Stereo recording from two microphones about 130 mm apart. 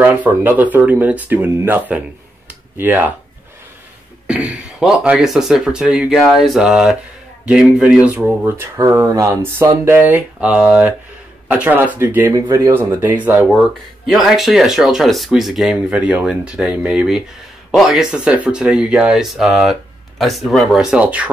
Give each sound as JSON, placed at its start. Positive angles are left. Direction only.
{"t": 0.2, "sound": "speech", "side_deg": -15}
{"t": 4.3, "sound": "speech", "side_deg": -5}
{"t": 14.0, "sound": "speech", "side_deg": 0}